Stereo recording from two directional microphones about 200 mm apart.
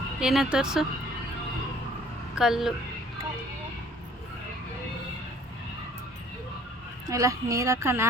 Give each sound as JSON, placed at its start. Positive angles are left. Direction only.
{"t": 0.2, "sound": "speech", "side_deg": -5}
{"t": 2.3, "sound": "speech", "side_deg": 0}
{"t": 7.1, "sound": "speech", "side_deg": -15}